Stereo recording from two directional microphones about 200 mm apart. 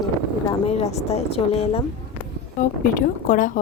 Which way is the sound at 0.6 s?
30° left (ahead or behind).